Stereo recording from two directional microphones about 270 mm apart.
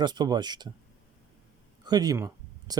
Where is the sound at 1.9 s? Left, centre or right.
Centre.